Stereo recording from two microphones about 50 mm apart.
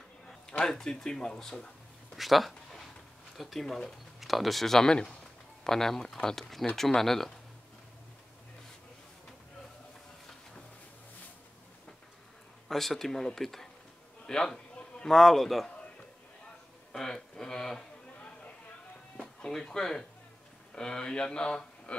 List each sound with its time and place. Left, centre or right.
0.5 s speech: centre
2.1 s a sound: centre
3.3 s speech: centre
12.6 s a man's voice: centre
16.9 s speech: centre
19.1 s speech: centre